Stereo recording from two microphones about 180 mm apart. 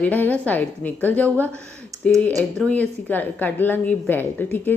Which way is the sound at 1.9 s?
20° right (ahead or behind).